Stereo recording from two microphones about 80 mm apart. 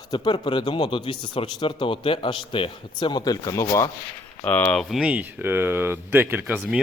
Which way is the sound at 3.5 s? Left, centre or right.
Left.